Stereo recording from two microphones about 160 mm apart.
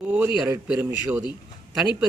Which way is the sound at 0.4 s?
15° right (ahead or behind).